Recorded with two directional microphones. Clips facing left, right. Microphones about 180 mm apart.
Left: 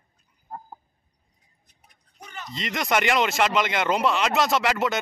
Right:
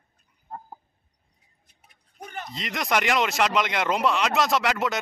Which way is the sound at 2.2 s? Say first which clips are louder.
Right 3 dB; 50° right (ahead or behind).